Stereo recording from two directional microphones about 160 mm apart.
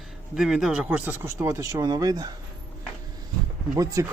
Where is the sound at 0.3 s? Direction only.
5° right (ahead or behind); by 2.3 s 25° right (ahead or behind).